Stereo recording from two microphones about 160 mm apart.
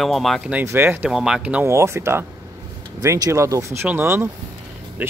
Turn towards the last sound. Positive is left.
turn(degrees=-15)  # may be behind; listen again after turning